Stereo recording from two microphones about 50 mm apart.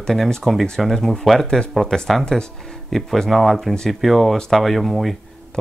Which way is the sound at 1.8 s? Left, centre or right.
Centre.